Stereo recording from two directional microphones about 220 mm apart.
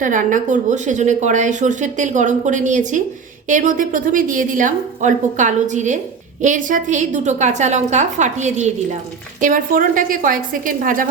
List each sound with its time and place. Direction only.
0.0 s a woman's voice: 35° right (ahead or behind)